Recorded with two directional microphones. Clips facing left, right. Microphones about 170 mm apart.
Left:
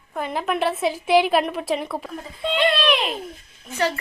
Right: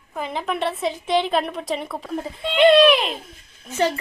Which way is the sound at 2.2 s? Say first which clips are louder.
Right 5 dB; 25° right (ahead or behind).